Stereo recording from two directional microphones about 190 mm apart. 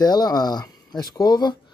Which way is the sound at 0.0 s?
20° left (ahead or behind).